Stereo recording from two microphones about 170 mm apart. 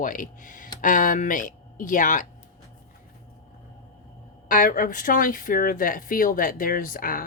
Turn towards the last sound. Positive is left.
turn(degrees=55)  # may be behind; listen again after turning